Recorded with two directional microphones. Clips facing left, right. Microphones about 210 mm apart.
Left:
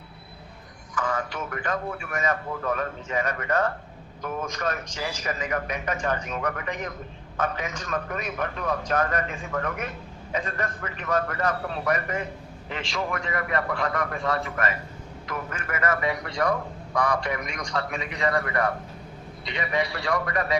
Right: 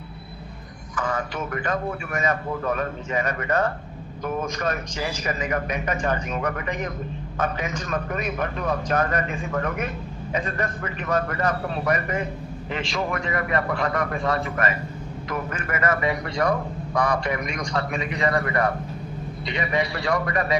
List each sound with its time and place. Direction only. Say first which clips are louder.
1.5 s a man's voice: right 3 dB; 20° right (ahead or behind)
16.9 s a man's voice: right 2 dB; 30° right (ahead or behind)
17.2 s a man's voice: right 4 dB; 15° right (ahead or behind)
18.3 s a man's voice: right 2 dB; 30° right (ahead or behind)
19.5 s a man's voice: right 2 dB; 15° right (ahead or behind)